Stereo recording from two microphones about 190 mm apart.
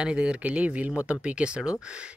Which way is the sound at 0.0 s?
5° right (ahead or behind).